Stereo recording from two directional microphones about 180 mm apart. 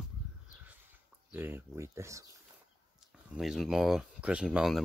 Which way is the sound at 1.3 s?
10° right (ahead or behind).